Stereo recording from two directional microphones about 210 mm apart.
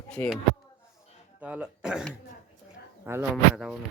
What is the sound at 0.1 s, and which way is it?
Speech, 5° left (ahead or behind).